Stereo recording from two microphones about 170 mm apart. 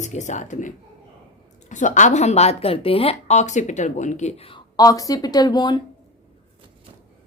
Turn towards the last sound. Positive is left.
turn(degrees=25)  # may be behind; listen again after turning